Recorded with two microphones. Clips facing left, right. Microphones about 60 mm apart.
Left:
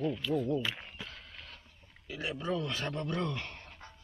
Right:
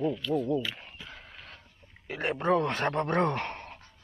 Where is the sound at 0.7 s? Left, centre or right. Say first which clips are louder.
Left 1 dB; centre.